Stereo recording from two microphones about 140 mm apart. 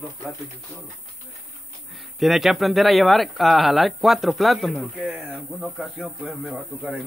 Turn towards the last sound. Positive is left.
turn(degrees=-5)  # may be behind; listen again after turning